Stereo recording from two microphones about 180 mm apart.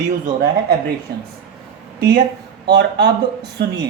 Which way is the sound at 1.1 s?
60° right (ahead or behind).